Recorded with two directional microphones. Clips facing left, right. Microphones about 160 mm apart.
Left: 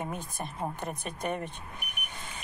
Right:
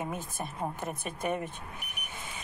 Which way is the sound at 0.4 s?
5° right (ahead or behind).